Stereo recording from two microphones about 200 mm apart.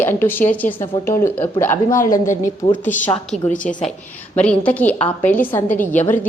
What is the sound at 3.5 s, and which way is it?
Speech, 40° left (ahead or behind).